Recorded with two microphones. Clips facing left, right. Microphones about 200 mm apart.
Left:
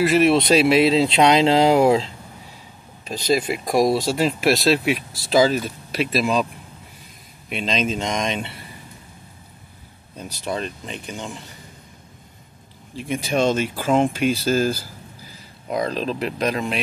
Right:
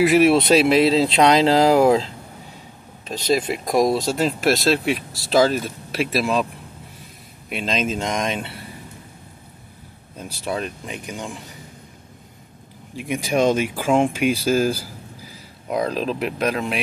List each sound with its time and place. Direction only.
0.0 s speech: 15° right (ahead or behind)
0.3 s speech: 5° right (ahead or behind)
3.1 s speech: 5° left (ahead or behind)
7.4 s speech: 5° right (ahead or behind)
10.1 s speech: 5° right (ahead or behind)
12.9 s speech: 10° right (ahead or behind)